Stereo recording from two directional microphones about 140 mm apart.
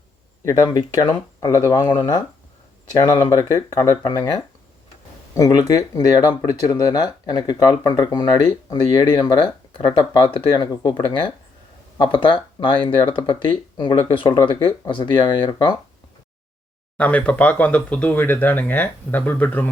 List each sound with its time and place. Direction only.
0.4 s speech: 25° left (ahead or behind)
3.0 s speech: 30° left (ahead or behind)
17.0 s speech: 10° left (ahead or behind)